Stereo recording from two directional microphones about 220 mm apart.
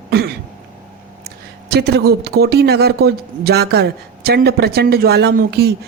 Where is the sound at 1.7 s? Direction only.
50° right (ahead or behind).